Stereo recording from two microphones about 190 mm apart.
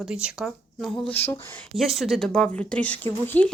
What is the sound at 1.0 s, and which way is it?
Speech, 10° left (ahead or behind).